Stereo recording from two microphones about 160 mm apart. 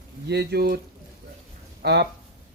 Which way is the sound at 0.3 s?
85° right.